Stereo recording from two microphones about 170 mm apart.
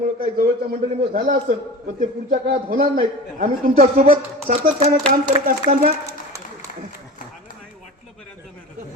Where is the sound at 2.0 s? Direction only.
60° right (ahead or behind).